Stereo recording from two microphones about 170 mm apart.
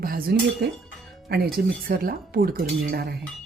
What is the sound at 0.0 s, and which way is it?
Speech, 60° right (ahead or behind).